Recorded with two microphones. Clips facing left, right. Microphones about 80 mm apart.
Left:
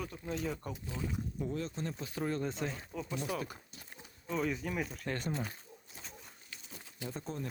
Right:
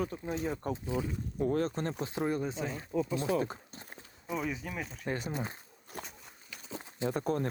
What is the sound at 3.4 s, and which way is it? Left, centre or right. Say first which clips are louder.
Speech: right 8 dB; right.